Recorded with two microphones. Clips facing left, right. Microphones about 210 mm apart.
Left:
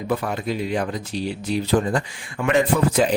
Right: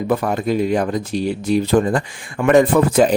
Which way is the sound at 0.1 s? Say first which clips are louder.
Right 5 dB; 50° right (ahead or behind).